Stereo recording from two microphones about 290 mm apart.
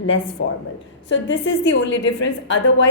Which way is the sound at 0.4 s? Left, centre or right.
Left.